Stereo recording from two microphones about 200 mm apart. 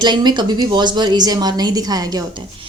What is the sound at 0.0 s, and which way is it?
A woman's voice, 20° right (ahead or behind).